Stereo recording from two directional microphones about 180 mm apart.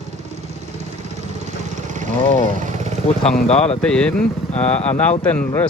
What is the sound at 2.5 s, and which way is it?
Vehicle, 40° right (ahead or behind).